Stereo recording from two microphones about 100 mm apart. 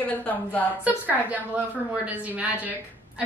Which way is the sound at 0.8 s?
15° right (ahead or behind).